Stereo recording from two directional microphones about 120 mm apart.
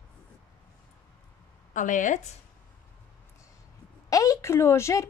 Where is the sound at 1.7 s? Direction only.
90° left.